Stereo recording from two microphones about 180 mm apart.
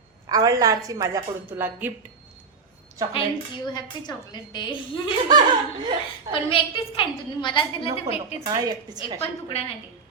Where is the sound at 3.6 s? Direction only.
25° left (ahead or behind).